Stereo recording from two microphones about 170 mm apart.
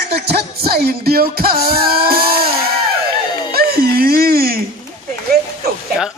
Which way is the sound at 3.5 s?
65° right (ahead or behind).